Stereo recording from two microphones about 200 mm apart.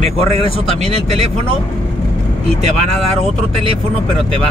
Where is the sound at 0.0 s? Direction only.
30° right (ahead or behind).